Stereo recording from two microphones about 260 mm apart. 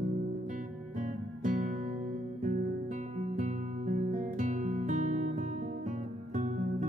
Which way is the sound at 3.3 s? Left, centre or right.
Right.